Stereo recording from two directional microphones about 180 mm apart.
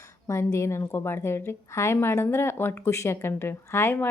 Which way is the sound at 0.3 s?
15° left (ahead or behind).